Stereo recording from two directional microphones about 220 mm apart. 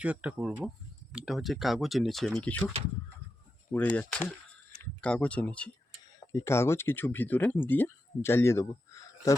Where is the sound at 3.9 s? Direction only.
5° left (ahead or behind).